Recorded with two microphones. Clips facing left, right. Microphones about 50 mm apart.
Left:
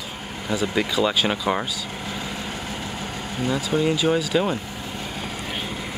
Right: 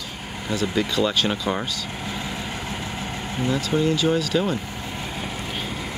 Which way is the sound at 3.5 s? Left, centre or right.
Centre.